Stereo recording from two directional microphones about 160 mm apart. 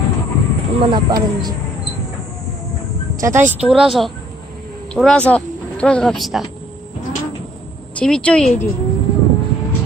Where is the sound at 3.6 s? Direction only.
5° right (ahead or behind).